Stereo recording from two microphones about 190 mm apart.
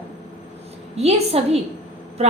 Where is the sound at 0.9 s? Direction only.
35° right (ahead or behind).